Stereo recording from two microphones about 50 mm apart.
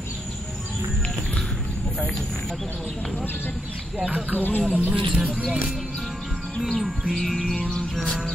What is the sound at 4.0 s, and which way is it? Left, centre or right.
Speech, right.